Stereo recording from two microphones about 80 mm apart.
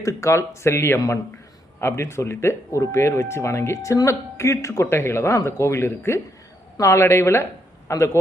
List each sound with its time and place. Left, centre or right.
0.0 s speech: left